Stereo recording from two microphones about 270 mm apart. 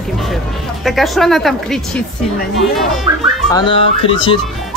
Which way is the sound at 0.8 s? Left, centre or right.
Centre.